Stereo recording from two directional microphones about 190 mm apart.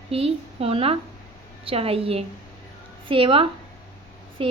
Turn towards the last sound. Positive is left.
turn(degrees=-30)  # may be behind; listen again after turning